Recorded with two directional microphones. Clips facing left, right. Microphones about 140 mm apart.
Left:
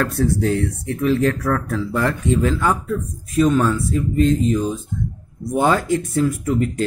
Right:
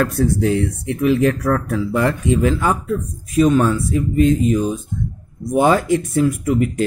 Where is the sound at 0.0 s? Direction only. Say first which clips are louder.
Right 2 dB; 15° right (ahead or behind).